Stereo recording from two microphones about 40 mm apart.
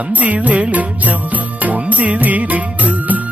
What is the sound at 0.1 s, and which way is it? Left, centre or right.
Music, right.